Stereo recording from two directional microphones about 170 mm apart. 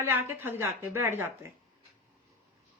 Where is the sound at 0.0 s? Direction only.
15° right (ahead or behind).